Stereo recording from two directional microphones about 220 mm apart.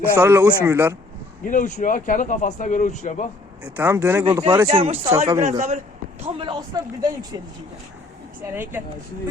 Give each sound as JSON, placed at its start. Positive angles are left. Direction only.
{"t": 0.2, "sound": "speech", "side_deg": -10}
{"t": 1.5, "sound": "speech", "side_deg": 35}
{"t": 3.6, "sound": "speech", "side_deg": -10}
{"t": 4.3, "sound": "a man's voice", "side_deg": -20}
{"t": 8.5, "sound": "speech", "side_deg": -10}